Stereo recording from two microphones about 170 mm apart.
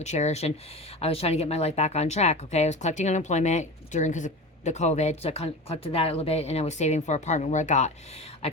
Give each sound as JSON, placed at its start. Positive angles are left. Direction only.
{"t": 0.0, "sound": "speech", "side_deg": 40}